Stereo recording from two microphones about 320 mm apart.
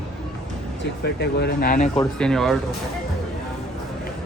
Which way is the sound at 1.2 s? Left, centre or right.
Left.